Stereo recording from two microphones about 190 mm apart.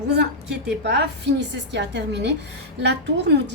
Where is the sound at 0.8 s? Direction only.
65° right (ahead or behind).